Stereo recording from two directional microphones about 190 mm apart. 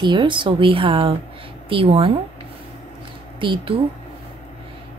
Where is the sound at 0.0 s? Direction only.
25° right (ahead or behind).